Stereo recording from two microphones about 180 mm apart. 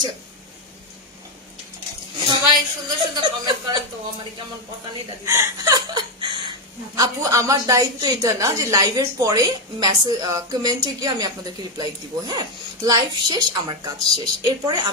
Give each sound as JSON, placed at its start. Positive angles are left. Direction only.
{"t": 2.1, "sound": "a sound", "side_deg": -25}
{"t": 3.2, "sound": "a woman's voice", "side_deg": -25}
{"t": 5.2, "sound": "chuckle", "side_deg": -15}
{"t": 7.0, "sound": "a woman's voice", "side_deg": -20}